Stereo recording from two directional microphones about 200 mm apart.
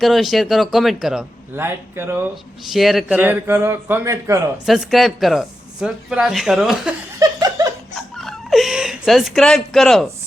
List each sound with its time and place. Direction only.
0.0 s speech: centre (ahead or behind)
2.3 s speech: centre (ahead or behind)
4.6 s speech: centre (ahead or behind)
7.2 s laughter: 20° right (ahead or behind)
7.9 s chuckle: centre (ahead or behind)